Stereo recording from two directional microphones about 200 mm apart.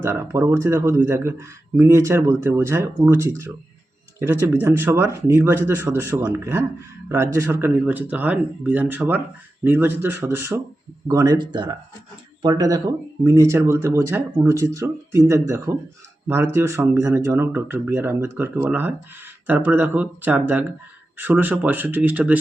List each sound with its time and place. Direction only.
0.0 s speech: 15° right (ahead or behind)